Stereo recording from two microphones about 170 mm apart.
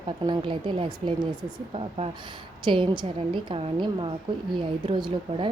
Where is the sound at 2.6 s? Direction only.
30° right (ahead or behind).